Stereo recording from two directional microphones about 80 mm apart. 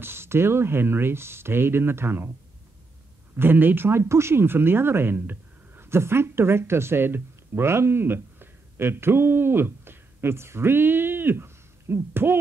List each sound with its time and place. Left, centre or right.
0.0 s speech: right
3.3 s speech: right